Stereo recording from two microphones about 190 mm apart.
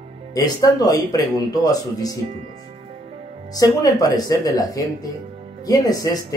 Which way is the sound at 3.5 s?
20° left (ahead or behind).